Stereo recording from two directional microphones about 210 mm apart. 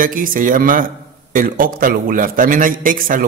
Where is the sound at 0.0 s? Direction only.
40° right (ahead or behind).